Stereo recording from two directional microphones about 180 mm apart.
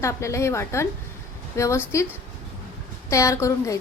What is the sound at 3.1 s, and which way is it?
Speech, 15° left (ahead or behind).